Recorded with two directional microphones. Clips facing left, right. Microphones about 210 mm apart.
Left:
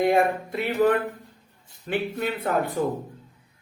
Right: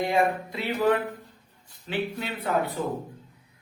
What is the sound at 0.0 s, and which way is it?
Speech, 50° left (ahead or behind).